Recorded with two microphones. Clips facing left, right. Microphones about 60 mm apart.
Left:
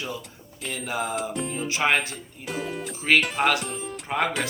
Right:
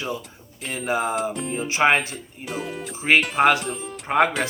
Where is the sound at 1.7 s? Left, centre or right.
Right.